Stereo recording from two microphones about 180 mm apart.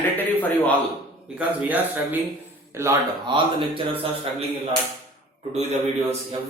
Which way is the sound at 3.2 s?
30° right (ahead or behind).